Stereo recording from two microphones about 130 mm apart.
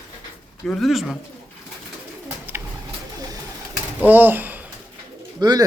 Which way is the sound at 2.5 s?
15° right (ahead or behind).